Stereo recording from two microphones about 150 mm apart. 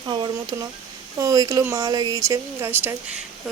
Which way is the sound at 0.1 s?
30° right (ahead or behind).